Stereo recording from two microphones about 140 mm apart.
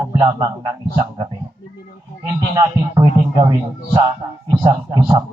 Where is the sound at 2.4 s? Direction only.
30° right (ahead or behind).